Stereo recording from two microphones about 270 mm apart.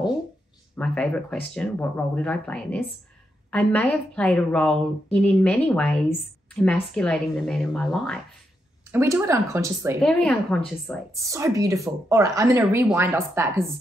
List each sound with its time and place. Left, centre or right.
0.7 s a woman's voice: centre
8.9 s speech: centre
10.0 s a woman's voice: centre
11.1 s speech: centre